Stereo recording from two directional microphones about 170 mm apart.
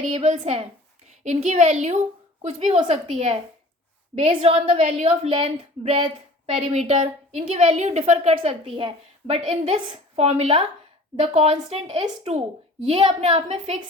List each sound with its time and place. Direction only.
0.1 s a woman's voice: 40° right (ahead or behind)